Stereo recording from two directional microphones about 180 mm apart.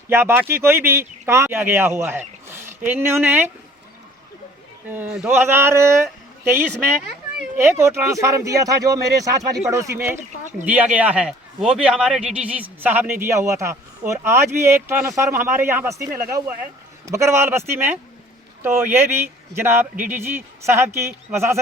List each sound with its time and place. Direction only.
0.1 s a man's voice: 10° right (ahead or behind)
4.9 s a man's voice: 5° right (ahead or behind)
17.1 s a man's voice: 15° right (ahead or behind)